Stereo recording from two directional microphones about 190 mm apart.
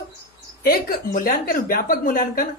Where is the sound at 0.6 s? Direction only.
50° left (ahead or behind).